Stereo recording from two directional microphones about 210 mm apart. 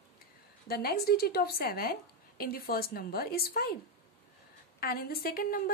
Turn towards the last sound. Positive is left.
turn(degrees=45)  # may be behind; listen again after turning